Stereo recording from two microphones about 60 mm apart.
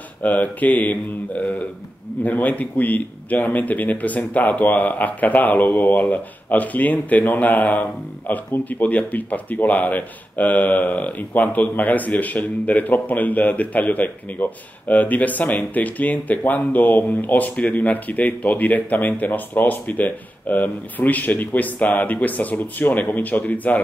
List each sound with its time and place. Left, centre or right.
0.2 s speech: left
2.2 s speech: left